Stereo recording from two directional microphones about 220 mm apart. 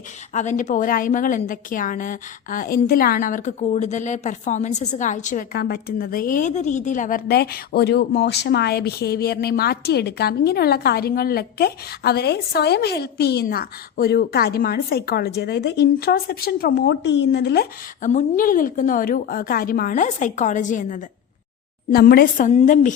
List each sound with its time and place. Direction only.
0.3 s a woman's voice: 35° left (ahead or behind)